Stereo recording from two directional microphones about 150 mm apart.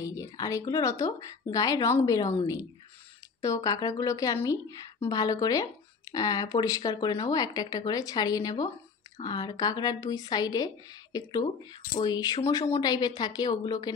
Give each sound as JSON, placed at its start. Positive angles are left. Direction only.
{"t": 0.0, "sound": "a woman's voice", "side_deg": 20}
{"t": 12.0, "sound": "a woman's voice", "side_deg": 25}